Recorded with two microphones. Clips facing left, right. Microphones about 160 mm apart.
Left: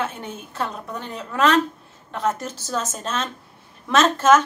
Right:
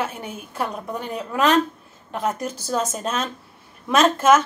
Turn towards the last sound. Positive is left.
turn(degrees=-10)  # may be behind; listen again after turning